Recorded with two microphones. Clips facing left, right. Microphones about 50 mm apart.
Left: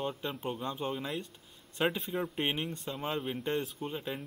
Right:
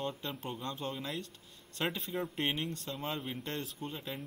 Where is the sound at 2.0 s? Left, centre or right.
Centre.